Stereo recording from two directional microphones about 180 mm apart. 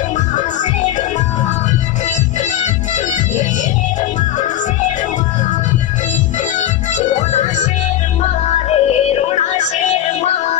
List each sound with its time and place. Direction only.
7.0 s music: 40° left (ahead or behind)
8.6 s music: 35° left (ahead or behind)